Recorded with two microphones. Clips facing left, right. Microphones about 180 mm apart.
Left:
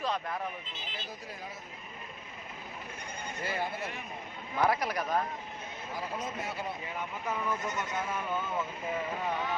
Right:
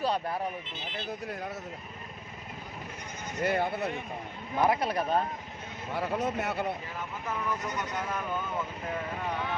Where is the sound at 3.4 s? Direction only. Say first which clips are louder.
Right 7 dB; 60° right (ahead or behind).